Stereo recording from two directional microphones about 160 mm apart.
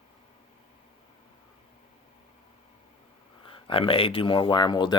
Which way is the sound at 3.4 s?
35° left (ahead or behind).